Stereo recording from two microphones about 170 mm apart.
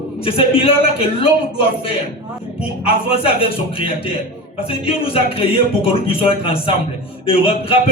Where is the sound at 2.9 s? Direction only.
35° left (ahead or behind).